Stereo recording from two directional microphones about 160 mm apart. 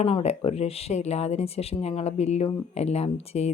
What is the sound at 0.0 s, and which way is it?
Speech, 40° left (ahead or behind).